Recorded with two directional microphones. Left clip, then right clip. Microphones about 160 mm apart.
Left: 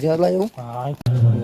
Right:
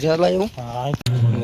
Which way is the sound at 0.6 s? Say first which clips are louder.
Right 2 dB; 60° right (ahead or behind).